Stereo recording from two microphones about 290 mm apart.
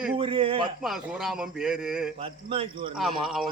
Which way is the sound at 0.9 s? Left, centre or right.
Centre.